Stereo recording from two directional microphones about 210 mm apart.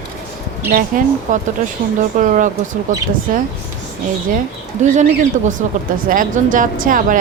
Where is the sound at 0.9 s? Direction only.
40° right (ahead or behind).